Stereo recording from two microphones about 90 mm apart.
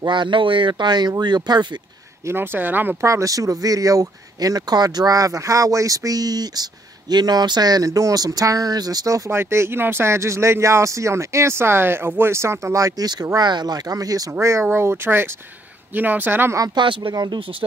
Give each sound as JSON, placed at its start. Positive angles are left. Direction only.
{"t": 0.0, "sound": "speech", "side_deg": -60}
{"t": 2.2, "sound": "speech", "side_deg": -25}
{"t": 3.1, "sound": "speech", "side_deg": -35}
{"t": 9.4, "sound": "speech", "side_deg": -30}
{"t": 14.4, "sound": "speech", "side_deg": -30}
{"t": 16.7, "sound": "speech", "side_deg": -70}
{"t": 17.1, "sound": "speech", "side_deg": -50}